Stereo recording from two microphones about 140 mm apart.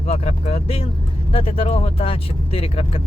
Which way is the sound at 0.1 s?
50° left (ahead or behind).